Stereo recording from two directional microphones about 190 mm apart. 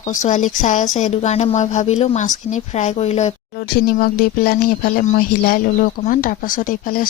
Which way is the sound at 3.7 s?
50° left (ahead or behind).